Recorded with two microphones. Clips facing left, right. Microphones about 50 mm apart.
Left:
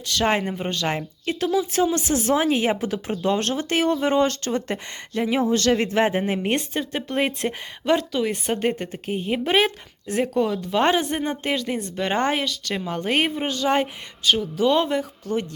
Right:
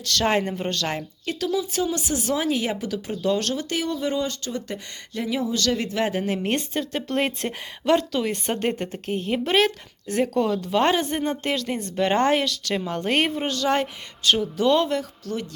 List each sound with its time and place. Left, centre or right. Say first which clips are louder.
0.0 s speech: even; centre
1.4 s speech: left 4 dB; left
5.1 s speech: left 4 dB; left; by 14.8 s centre
14.8 s speech: left 1 dB; centre